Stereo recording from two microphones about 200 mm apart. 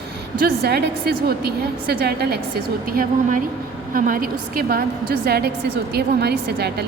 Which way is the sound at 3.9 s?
45° right (ahead or behind).